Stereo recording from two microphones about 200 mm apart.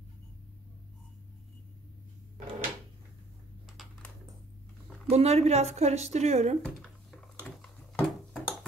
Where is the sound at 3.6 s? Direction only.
Centre (ahead or behind).